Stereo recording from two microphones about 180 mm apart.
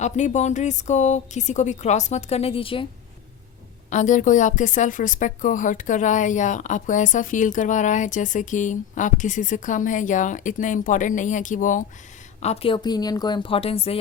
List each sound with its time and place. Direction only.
0.0 s a woman's voice: 40° left (ahead or behind)
3.8 s a woman's voice: 45° left (ahead or behind)
12.4 s a woman's voice: 35° left (ahead or behind)